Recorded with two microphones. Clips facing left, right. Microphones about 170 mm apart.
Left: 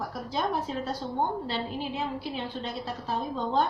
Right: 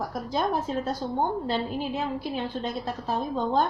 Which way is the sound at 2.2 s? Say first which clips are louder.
Right 4 dB; 45° right (ahead or behind).